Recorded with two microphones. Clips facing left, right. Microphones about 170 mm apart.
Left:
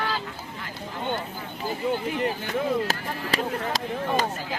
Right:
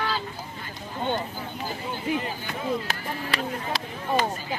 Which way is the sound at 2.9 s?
40° left (ahead or behind).